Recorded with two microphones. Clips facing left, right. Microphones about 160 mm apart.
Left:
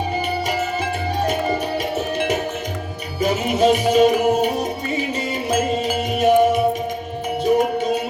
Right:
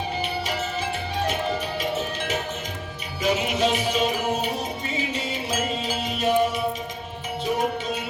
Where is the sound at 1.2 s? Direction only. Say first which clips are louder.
Left 5 dB; 45° left (ahead or behind).